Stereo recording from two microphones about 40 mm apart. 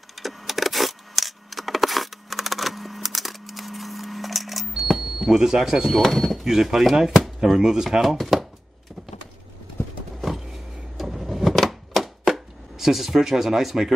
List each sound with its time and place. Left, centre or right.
0.2 s a sound: centre
5.9 s speech: centre
6.4 s chopping: centre
10.2 s vehicle: centre
11.5 s chopping: centre